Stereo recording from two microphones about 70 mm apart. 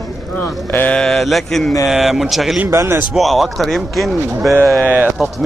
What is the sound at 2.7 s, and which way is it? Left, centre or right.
Speech, right.